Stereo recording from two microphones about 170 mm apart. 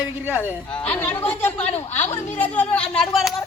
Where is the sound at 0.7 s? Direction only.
10° left (ahead or behind).